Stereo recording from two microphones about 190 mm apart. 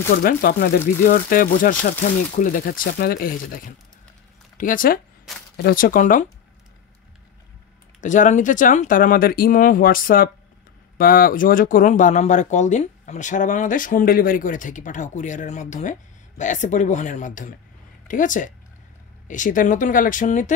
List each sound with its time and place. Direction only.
0.1 s speech: 50° left (ahead or behind)
8.0 s speech: 40° left (ahead or behind)